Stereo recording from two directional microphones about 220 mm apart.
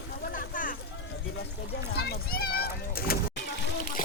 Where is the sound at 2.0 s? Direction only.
45° left (ahead or behind).